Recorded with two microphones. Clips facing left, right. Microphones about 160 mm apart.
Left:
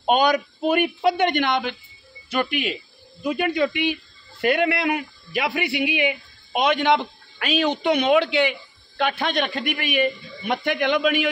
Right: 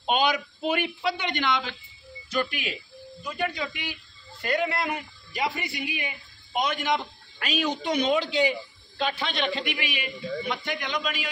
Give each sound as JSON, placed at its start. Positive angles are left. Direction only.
{"t": 0.0, "sound": "a man's voice", "side_deg": 50}
{"t": 2.2, "sound": "speech", "side_deg": 65}